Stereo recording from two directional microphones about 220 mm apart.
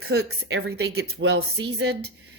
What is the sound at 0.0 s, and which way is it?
Speech, 50° right (ahead or behind).